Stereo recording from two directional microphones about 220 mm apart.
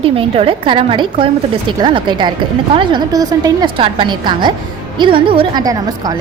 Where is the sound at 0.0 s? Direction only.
25° right (ahead or behind).